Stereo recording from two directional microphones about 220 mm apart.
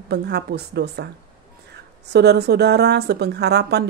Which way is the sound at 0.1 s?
50° right (ahead or behind).